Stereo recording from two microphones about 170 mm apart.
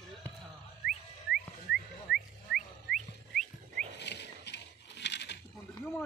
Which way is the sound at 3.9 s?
85° left.